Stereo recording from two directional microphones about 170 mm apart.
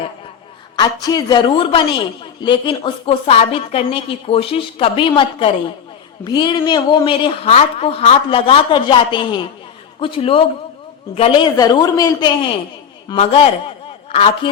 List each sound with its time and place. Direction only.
0.8 s a man's voice: 25° left (ahead or behind)
13.1 s speech: 35° left (ahead or behind)